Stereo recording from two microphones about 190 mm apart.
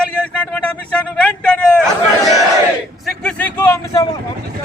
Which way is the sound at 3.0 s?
5° left (ahead or behind).